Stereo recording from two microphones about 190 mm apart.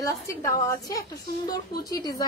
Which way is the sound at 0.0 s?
15° left (ahead or behind).